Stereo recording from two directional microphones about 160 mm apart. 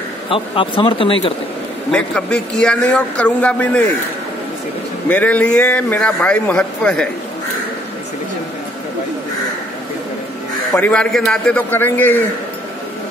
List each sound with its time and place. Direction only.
0.3 s speech: 30° left (ahead or behind)
1.9 s a man's voice: 5° left (ahead or behind)
5.0 s a man's voice: 10° left (ahead or behind)
10.7 s a man's voice: 5° left (ahead or behind)